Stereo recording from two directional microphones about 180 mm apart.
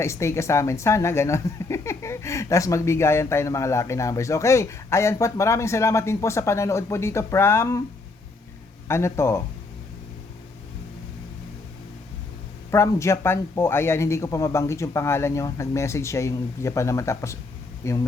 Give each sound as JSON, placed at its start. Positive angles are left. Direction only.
{"t": 0.0, "sound": "speech", "side_deg": 15}
{"t": 8.9, "sound": "speech", "side_deg": 15}
{"t": 12.7, "sound": "speech", "side_deg": 15}